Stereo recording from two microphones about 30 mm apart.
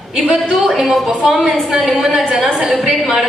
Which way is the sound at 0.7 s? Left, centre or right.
Centre.